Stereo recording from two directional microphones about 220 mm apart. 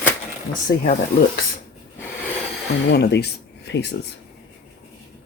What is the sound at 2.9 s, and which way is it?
Speech, 50° left (ahead or behind).